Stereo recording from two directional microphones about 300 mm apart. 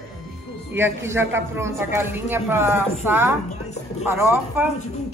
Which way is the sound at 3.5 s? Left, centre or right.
Left.